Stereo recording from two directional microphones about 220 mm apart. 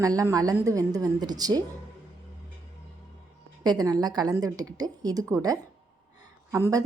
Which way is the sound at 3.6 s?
15° right (ahead or behind).